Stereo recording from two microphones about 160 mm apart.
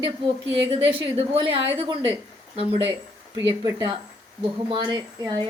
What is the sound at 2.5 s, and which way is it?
Speech, 40° right (ahead or behind).